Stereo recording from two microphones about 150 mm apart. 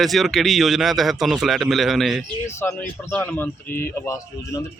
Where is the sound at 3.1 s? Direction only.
10° left (ahead or behind).